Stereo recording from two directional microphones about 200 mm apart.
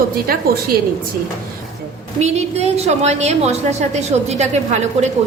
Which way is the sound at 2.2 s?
35° right (ahead or behind).